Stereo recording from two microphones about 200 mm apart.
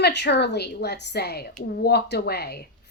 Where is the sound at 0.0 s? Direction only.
60° left (ahead or behind).